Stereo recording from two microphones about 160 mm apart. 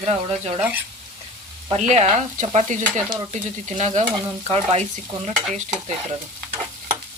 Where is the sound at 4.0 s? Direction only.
40° right (ahead or behind).